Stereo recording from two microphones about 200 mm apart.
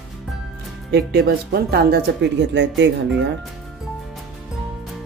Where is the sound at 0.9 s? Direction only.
55° right (ahead or behind).